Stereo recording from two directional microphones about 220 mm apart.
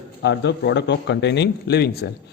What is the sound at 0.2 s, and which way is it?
Speech, 50° left (ahead or behind).